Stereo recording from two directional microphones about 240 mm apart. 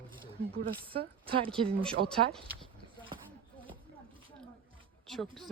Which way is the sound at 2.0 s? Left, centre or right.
Right.